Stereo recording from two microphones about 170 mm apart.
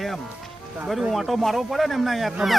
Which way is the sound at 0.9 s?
Centre (ahead or behind).